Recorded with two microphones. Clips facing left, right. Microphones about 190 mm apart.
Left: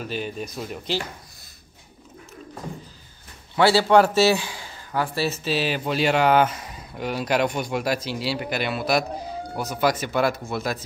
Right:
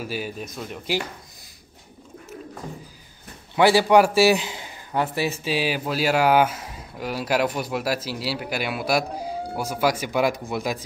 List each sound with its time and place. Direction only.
0.0 s speech: 5° right (ahead or behind)
3.5 s a man's voice: 15° right (ahead or behind)